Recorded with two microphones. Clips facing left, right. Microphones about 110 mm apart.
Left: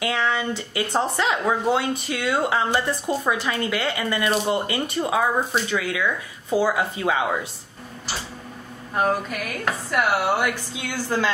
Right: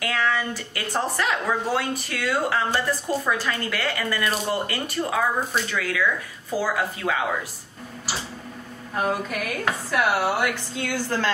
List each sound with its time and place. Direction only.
0.0 s speech: 20° left (ahead or behind)
9.3 s chopping: centre (ahead or behind)
10.7 s a woman's voice: 5° left (ahead or behind)